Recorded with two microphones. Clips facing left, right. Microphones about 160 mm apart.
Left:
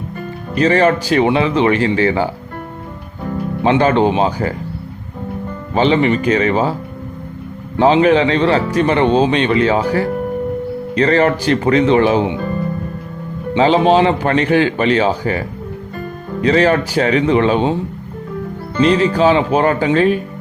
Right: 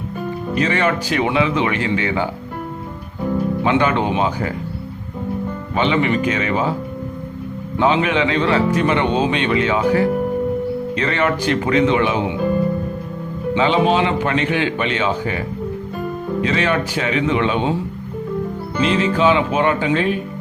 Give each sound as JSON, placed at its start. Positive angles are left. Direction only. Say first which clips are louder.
{"t": 0.6, "sound": "speech", "louder": "left 7 dB", "side_deg": 35}
{"t": 3.6, "sound": "speech", "louder": "left 7 dB", "side_deg": 35}
{"t": 5.7, "sound": "speech", "louder": "left 4 dB", "side_deg": 35}
{"t": 7.8, "sound": "speech", "louder": "left 6 dB", "side_deg": 35}
{"t": 13.6, "sound": "speech", "louder": "left 5 dB", "side_deg": 40}
{"t": 18.9, "sound": "speech", "louder": "left 3 dB", "side_deg": 40}